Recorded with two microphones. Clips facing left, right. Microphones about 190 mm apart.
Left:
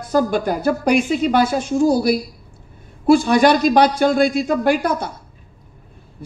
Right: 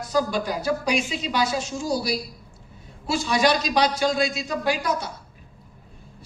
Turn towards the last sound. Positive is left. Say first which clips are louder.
# left 7 dB
turn(degrees=55)  # may be behind; listen again after turning